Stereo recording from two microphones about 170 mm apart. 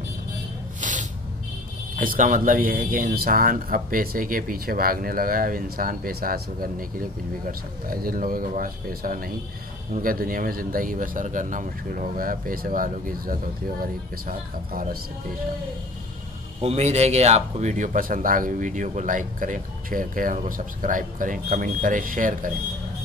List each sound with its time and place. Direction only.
0.7 s spray: 50° right (ahead or behind)
2.0 s speech: 50° right (ahead or behind)
16.6 s speech: 40° right (ahead or behind)